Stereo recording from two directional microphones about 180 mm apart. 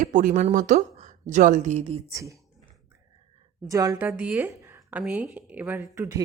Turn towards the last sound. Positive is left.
turn(degrees=-15)  # may be behind; listen again after turning